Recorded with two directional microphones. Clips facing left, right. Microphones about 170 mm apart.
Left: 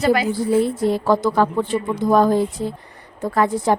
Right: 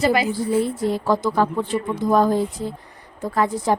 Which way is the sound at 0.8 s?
70° left (ahead or behind).